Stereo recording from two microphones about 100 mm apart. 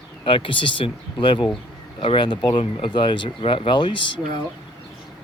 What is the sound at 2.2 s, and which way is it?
Speech, 50° left (ahead or behind).